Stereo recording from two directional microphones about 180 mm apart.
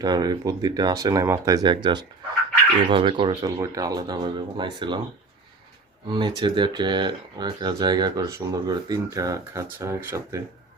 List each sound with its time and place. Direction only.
0.0 s speech: 20° right (ahead or behind)
6.1 s speech: 25° right (ahead or behind)